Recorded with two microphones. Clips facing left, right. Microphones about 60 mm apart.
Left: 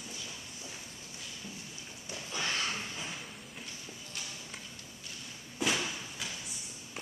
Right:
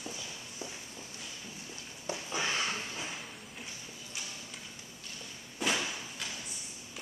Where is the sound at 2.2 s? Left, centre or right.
Centre.